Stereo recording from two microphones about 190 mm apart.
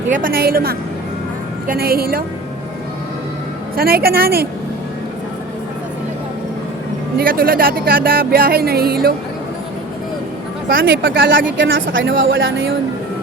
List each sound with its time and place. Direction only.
0.1 s speech: 50° right (ahead or behind)
3.8 s speech: 50° right (ahead or behind)
7.2 s speech: 50° right (ahead or behind)
10.7 s speech: 50° right (ahead or behind)
11.5 s speech: 75° right (ahead or behind)
11.9 s speech: 85° right